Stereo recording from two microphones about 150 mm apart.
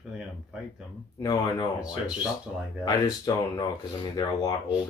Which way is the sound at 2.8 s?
25° left (ahead or behind).